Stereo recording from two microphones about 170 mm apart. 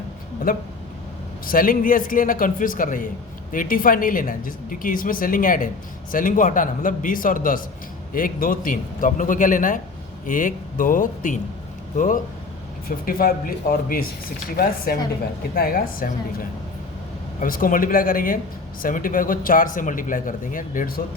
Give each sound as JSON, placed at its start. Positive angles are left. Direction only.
{"t": 0.5, "sound": "speech", "side_deg": 55}
{"t": 13.1, "sound": "speech", "side_deg": 60}
{"t": 17.4, "sound": "speech", "side_deg": 55}